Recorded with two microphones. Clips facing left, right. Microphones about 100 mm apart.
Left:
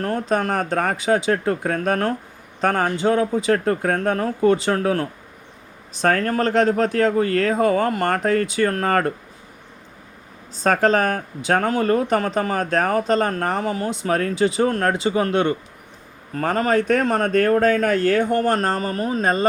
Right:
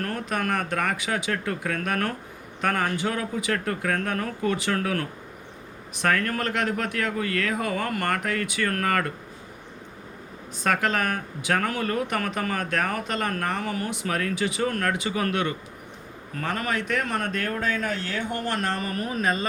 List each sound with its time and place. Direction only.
0.0 s speech: 30° left (ahead or behind)
10.5 s speech: 30° left (ahead or behind)